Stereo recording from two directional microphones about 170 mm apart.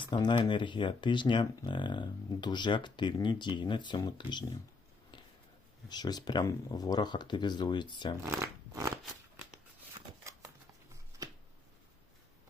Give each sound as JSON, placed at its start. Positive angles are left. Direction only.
{"t": 0.1, "sound": "speech", "side_deg": 25}
{"t": 5.1, "sound": "a sound", "side_deg": 25}
{"t": 5.9, "sound": "speech", "side_deg": 25}
{"t": 8.2, "sound": "speech", "side_deg": -15}